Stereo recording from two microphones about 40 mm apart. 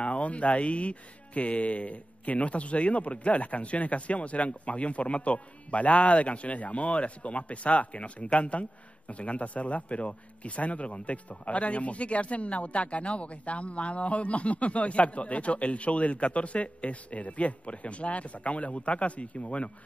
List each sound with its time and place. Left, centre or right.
0.0 s speech: left